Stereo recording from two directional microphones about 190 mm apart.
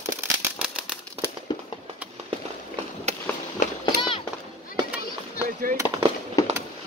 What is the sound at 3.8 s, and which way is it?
Run, 25° left (ahead or behind).